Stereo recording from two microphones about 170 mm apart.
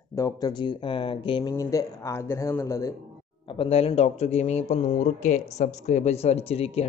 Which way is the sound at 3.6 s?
35° left (ahead or behind).